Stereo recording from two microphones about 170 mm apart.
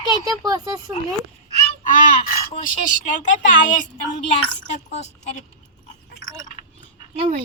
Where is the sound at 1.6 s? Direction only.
55° left (ahead or behind).